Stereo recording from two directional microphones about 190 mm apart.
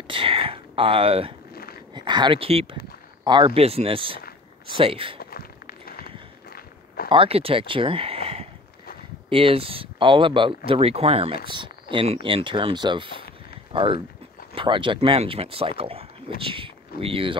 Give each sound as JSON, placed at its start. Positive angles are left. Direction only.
{"t": 0.1, "sound": "speech", "side_deg": -30}
{"t": 1.5, "sound": "a sound", "side_deg": 55}
{"t": 2.0, "sound": "speech", "side_deg": -25}
{"t": 5.2, "sound": "run", "side_deg": 50}
{"t": 7.1, "sound": "speech", "side_deg": -30}